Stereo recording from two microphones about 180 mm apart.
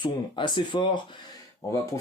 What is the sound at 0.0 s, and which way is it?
Speech, 25° left (ahead or behind).